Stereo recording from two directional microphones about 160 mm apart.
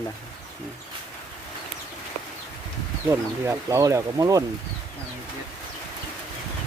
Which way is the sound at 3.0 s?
15° right (ahead or behind).